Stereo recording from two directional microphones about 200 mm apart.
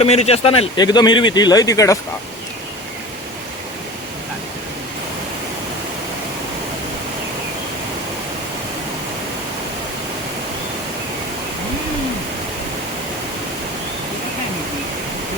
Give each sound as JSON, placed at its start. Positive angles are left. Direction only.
{"t": 0.0, "sound": "speech", "side_deg": 30}